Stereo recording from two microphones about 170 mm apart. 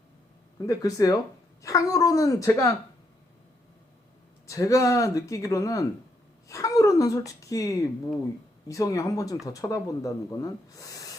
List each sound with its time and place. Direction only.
0.6 s speech: 20° left (ahead or behind)
4.4 s speech: 20° left (ahead or behind)